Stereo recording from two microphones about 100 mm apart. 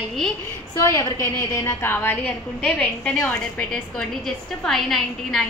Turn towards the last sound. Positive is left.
turn(degrees=5)  # may be behind; listen again after turning